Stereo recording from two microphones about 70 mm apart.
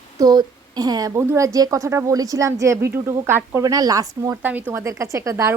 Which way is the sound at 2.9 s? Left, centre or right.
Right.